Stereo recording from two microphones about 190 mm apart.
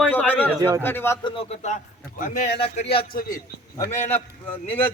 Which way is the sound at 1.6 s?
40° left (ahead or behind).